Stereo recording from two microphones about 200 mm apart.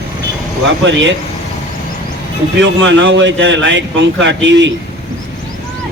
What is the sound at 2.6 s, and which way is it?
A man's voice, 65° right (ahead or behind).